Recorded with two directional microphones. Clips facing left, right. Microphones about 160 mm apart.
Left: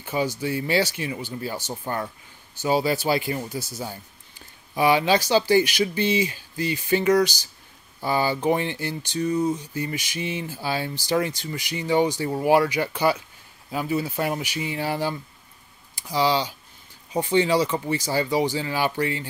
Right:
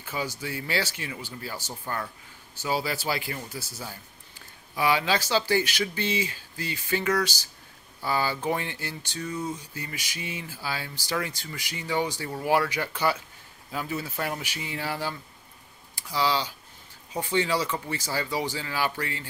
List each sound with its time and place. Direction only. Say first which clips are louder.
0.0 s speech: left 7 dB; 20° left (ahead or behind)
4.7 s speech: left 5 dB; 20° left (ahead or behind)